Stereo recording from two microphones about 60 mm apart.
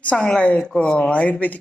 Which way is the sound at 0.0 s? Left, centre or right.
Centre.